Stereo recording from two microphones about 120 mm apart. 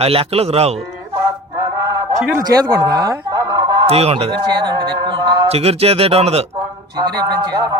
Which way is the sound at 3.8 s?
55° right (ahead or behind).